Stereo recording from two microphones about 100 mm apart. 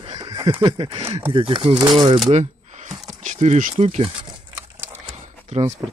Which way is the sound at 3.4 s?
90° right.